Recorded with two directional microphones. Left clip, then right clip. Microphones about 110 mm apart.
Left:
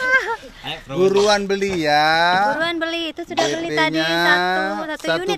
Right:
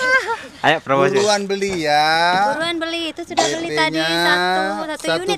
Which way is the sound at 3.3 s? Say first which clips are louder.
Right 2 dB; 50° right (ahead or behind).